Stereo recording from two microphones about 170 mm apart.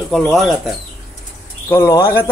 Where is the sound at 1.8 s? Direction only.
15° left (ahead or behind).